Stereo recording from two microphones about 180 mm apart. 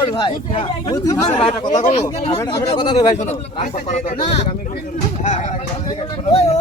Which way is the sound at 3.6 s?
45° left (ahead or behind).